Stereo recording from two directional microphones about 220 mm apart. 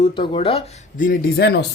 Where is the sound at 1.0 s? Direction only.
45° left (ahead or behind).